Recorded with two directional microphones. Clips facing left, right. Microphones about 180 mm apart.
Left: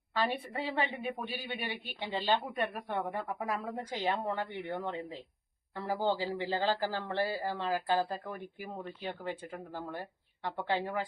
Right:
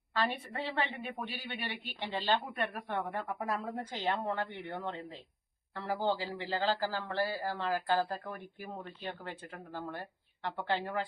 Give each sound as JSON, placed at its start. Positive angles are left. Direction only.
{"t": 0.1, "sound": "speech", "side_deg": 10}
{"t": 5.7, "sound": "speech", "side_deg": 15}